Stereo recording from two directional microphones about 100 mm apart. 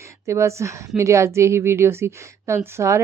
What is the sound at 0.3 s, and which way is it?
Speech, 30° right (ahead or behind).